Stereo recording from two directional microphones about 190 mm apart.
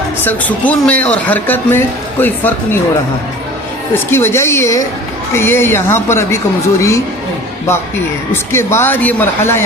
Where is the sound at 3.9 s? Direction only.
10° left (ahead or behind).